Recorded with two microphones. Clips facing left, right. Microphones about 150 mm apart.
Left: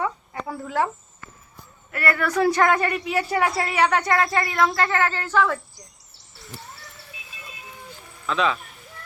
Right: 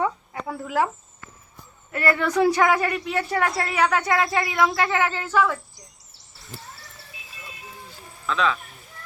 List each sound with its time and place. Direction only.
0.4 s speech: 5° right (ahead or behind)
1.9 s speech: 25° right (ahead or behind)
2.6 s speech: 5° right (ahead or behind)
4.9 s a sound: 10° right (ahead or behind)
8.3 s speech: 10° left (ahead or behind)